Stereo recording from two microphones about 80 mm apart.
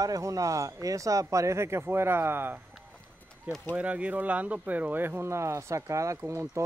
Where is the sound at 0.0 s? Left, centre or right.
Right.